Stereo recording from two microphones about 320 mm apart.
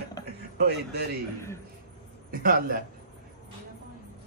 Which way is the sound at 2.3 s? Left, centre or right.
Right.